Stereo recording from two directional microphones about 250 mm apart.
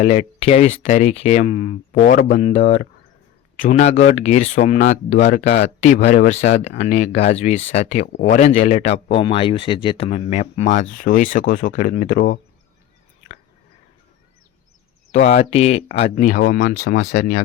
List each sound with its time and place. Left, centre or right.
0.0 s speech: left
15.1 s speech: left